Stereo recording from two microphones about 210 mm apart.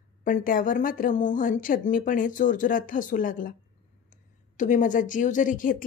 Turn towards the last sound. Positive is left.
turn(degrees=40)  # may be behind; listen again after turning